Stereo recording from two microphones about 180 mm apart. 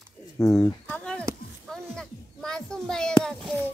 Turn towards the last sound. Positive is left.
turn(degrees=5)  # may be behind; listen again after turning